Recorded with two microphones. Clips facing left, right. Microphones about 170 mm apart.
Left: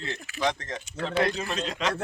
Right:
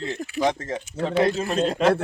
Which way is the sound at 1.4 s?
50° right (ahead or behind).